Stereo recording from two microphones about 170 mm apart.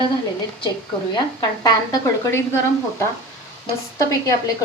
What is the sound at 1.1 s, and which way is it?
A woman's voice, 25° left (ahead or behind).